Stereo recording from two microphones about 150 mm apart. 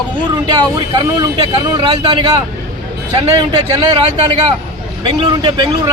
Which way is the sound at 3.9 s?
35° right (ahead or behind).